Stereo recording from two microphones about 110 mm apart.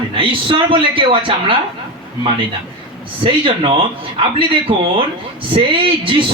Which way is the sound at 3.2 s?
50° right (ahead or behind).